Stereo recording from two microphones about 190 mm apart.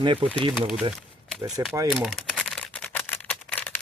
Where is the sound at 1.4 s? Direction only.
20° right (ahead or behind).